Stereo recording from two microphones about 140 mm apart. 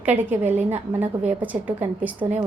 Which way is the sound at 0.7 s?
55° right (ahead or behind).